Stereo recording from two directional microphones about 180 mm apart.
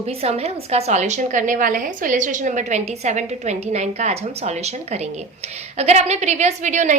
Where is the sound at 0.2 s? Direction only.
35° right (ahead or behind).